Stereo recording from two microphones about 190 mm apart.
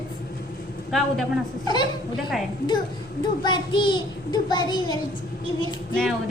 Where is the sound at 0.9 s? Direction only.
Centre (ahead or behind).